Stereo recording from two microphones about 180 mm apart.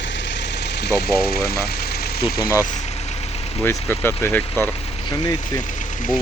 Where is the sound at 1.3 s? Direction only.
60° left (ahead or behind).